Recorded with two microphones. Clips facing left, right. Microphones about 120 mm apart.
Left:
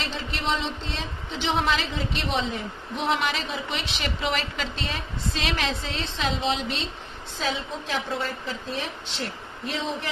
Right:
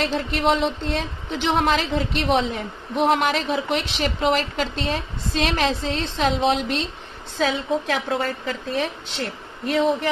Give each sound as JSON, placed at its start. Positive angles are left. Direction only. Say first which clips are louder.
{"t": 0.0, "sound": "a woman's voice", "louder": "right 9 dB", "side_deg": -55}
{"t": 7.3, "sound": "a woman's voice", "louder": "right 8 dB", "side_deg": -80}